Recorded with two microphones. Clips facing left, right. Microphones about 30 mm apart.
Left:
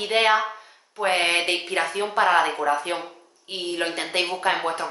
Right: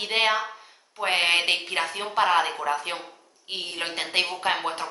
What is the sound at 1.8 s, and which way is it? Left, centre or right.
Speech, centre.